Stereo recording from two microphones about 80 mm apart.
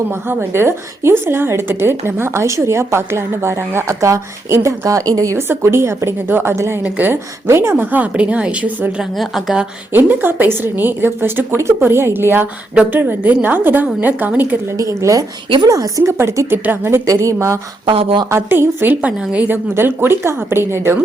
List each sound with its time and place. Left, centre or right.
0.1 s a woman's voice: right
5.4 s a woman's voice: right
9.0 s a woman's voice: centre
9.9 s a woman's voice: right
14.8 s a woman's voice: right
17.8 s speech: right
18.3 s a woman's voice: right
19.7 s a woman's voice: right